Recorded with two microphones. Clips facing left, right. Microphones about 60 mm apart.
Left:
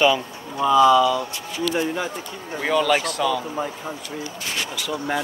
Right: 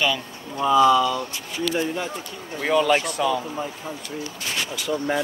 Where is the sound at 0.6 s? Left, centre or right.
Centre.